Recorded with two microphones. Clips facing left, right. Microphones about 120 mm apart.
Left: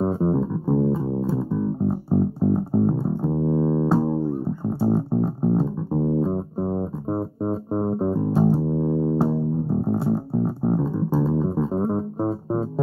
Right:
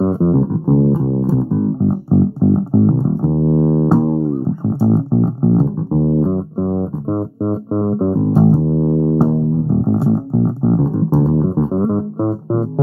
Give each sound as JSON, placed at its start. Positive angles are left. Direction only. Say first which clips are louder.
{"t": 0.0, "sound": "music", "louder": "right 7 dB", "side_deg": -30}